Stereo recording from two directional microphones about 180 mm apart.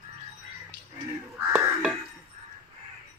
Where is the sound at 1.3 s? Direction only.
10° right (ahead or behind).